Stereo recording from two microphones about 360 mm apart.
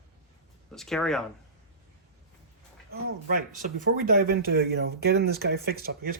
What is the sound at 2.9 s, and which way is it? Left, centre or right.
Speech, right.